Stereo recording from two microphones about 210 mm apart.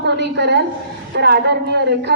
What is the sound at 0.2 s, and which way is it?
A woman's voice, 55° right (ahead or behind).